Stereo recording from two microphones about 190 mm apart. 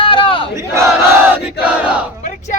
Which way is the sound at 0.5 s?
15° right (ahead or behind).